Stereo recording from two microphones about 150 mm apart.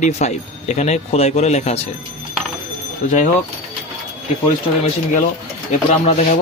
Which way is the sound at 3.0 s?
55° left (ahead or behind).